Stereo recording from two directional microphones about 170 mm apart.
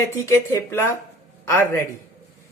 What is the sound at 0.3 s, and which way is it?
Speech, 15° left (ahead or behind).